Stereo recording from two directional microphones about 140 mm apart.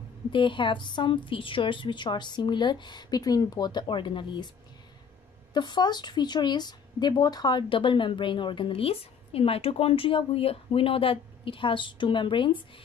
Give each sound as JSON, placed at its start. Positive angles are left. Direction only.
{"t": 0.3, "sound": "speech", "side_deg": 35}
{"t": 5.5, "sound": "speech", "side_deg": 30}